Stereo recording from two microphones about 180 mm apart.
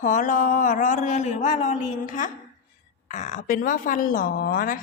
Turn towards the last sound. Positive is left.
turn(degrees=55)  # may be behind; listen again after turning